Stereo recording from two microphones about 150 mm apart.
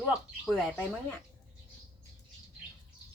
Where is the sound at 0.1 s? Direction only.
Centre (ahead or behind).